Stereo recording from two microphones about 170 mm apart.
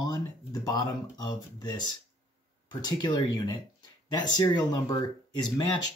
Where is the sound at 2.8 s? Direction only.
25° left (ahead or behind).